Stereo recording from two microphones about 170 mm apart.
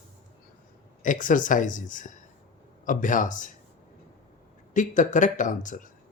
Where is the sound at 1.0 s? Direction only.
50° left (ahead or behind).